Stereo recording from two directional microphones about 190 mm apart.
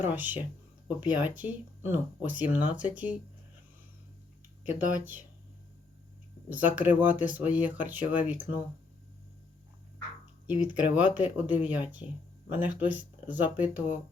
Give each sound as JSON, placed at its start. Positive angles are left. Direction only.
{"t": 0.0, "sound": "speech", "side_deg": -10}
{"t": 4.7, "sound": "speech", "side_deg": -10}
{"t": 6.5, "sound": "speech", "side_deg": -10}
{"t": 10.4, "sound": "speech", "side_deg": -10}